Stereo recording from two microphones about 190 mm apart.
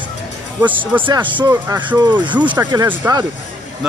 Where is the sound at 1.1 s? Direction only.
25° right (ahead or behind).